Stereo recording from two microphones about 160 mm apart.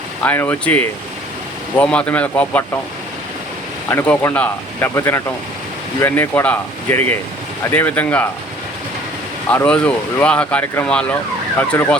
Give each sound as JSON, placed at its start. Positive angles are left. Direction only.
{"t": 0.3, "sound": "speech", "side_deg": 10}
{"t": 3.8, "sound": "speech", "side_deg": 10}
{"t": 9.5, "sound": "speech", "side_deg": 10}